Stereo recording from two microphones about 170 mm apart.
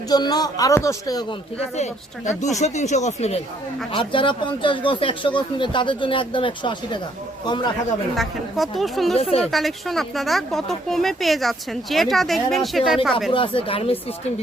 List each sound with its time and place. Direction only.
0.1 s speech: 25° left (ahead or behind)
1.7 s speech: 40° left (ahead or behind); by 7.7 s 25° left (ahead or behind)
8.1 s speech: centre (ahead or behind)
13.3 s speech: 30° left (ahead or behind)